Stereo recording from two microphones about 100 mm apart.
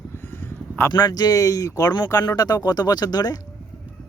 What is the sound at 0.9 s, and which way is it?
Speech, 40° left (ahead or behind).